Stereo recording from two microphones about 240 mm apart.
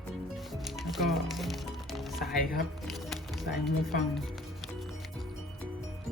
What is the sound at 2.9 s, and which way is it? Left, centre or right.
Speech, centre.